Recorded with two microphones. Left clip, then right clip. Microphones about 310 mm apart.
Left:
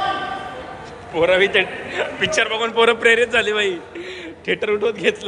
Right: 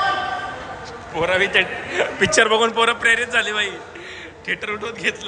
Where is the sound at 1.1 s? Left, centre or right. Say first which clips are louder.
Left 2 dB; centre.